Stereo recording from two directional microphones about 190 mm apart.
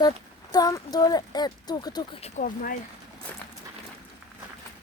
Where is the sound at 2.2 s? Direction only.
45° left (ahead or behind).